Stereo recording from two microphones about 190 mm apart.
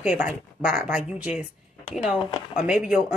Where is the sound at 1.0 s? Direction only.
40° left (ahead or behind).